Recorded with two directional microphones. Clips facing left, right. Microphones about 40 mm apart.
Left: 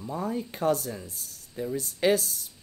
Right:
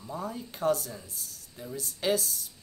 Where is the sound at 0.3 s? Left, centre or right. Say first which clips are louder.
Left 2 dB; left.